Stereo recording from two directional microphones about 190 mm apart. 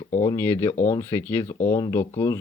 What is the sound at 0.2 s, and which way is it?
Speech, 10° left (ahead or behind).